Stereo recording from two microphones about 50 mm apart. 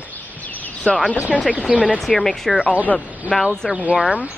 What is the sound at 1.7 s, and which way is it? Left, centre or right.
Speech, centre.